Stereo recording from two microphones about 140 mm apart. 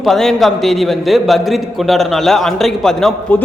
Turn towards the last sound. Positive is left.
turn(degrees=5)  # may be behind; listen again after turning